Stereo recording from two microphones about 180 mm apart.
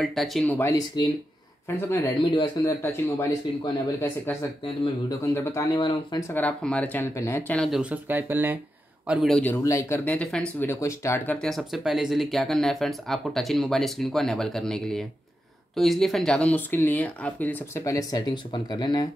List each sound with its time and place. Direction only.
0.0 s speech: centre (ahead or behind)
0.6 s speech: 20° left (ahead or behind)
3.7 s speech: 15° left (ahead or behind)
6.4 s speech: 5° left (ahead or behind)
7.5 s speech: centre (ahead or behind)
9.4 s speech: 15° left (ahead or behind)